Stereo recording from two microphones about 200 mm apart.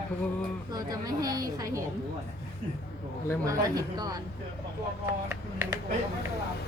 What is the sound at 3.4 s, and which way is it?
Speech, 20° right (ahead or behind).